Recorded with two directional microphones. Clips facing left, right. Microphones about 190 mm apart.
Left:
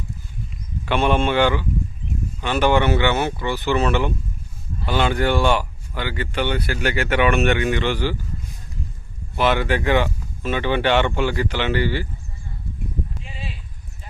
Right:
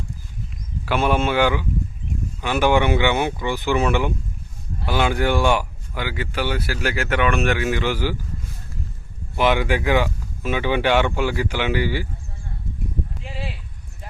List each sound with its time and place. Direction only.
0.9 s speech: 5° right (ahead or behind)
9.3 s speech: 15° right (ahead or behind)
13.2 s a sound: 70° right (ahead or behind)